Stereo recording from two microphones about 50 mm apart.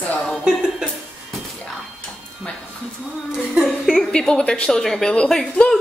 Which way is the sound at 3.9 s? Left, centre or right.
Centre.